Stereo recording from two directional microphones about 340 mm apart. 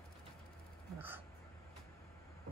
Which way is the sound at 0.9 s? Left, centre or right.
Centre.